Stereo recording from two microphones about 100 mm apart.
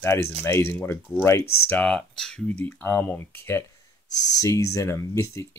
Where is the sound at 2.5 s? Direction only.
15° left (ahead or behind).